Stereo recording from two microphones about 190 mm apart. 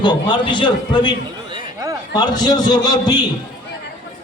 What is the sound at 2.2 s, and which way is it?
A man's voice, 20° left (ahead or behind).